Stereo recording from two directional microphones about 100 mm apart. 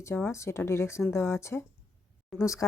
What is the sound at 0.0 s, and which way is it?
Speech, 25° left (ahead or behind).